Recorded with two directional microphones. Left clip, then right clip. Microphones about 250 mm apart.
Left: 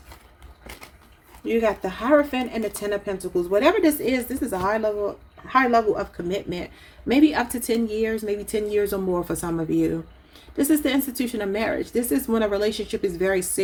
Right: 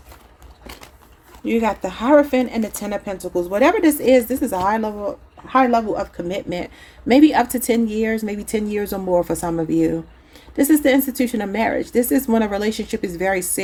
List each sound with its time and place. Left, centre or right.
1.5 s a woman's voice: right